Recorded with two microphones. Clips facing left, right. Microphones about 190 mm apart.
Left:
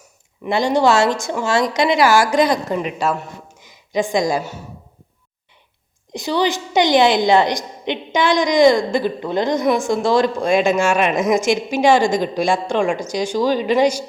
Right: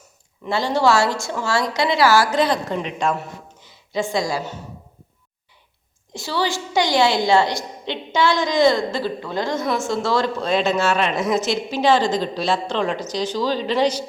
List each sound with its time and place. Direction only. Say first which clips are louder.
0.4 s a woman's voice: left 3 dB; 15° left (ahead or behind)
6.1 s a woman's voice: left 4 dB; 20° left (ahead or behind)